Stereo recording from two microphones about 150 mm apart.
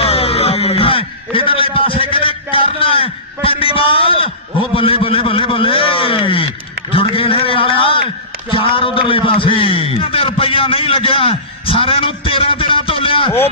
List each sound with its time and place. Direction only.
0.0 s music: 40° left (ahead or behind)
4.7 s a man's voice: 35° left (ahead or behind)